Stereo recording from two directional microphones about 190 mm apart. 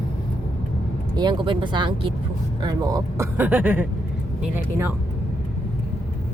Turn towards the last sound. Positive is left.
turn(degrees=-10)  # may be behind; listen again after turning